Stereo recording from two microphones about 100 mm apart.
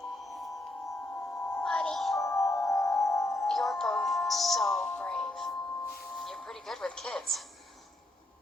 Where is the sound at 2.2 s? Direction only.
30° left (ahead or behind).